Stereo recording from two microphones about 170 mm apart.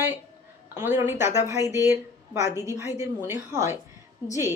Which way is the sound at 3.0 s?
15° right (ahead or behind).